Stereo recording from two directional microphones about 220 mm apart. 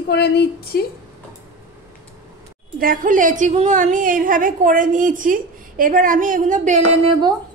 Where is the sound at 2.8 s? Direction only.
40° right (ahead or behind).